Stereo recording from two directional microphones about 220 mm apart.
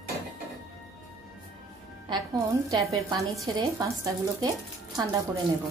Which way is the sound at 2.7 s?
15° right (ahead or behind).